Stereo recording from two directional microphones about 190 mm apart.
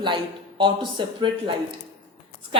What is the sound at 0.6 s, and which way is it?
Speech, 25° right (ahead or behind).